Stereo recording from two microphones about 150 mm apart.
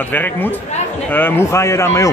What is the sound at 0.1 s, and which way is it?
A man's voice, 15° left (ahead or behind).